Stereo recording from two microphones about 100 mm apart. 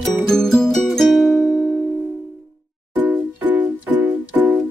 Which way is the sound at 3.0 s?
15° right (ahead or behind).